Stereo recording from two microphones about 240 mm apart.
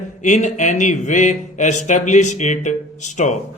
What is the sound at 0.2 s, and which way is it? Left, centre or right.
Speech, left.